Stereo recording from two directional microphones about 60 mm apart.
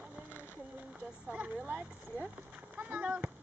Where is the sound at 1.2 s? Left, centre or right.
Centre.